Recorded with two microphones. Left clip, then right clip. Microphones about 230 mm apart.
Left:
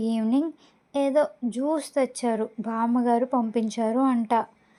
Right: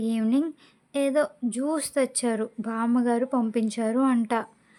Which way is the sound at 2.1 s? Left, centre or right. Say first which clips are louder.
Left 1 dB; centre.